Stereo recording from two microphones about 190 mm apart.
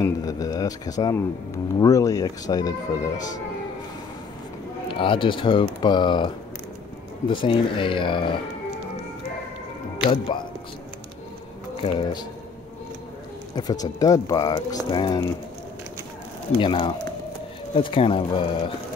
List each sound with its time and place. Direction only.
0.0 s a sound: 20° left (ahead or behind)
1.8 s speech: 20° left (ahead or behind)
4.9 s speech: 25° left (ahead or behind)
10.0 s speech: 25° left (ahead or behind)
11.8 s speech: 25° left (ahead or behind)
13.6 s speech: 20° left (ahead or behind)
16.5 s speech: 25° left (ahead or behind)